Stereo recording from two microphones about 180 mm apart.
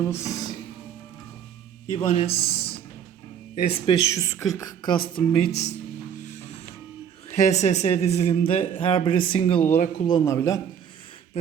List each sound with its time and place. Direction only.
0.0 s speech: 15° left (ahead or behind)
1.9 s a man's voice: 30° left (ahead or behind)
3.9 s a woman's voice: 20° left (ahead or behind)
7.3 s a man's voice: 40° left (ahead or behind)
9.6 s a man's voice: 40° left (ahead or behind)
10.1 s speech: 20° left (ahead or behind)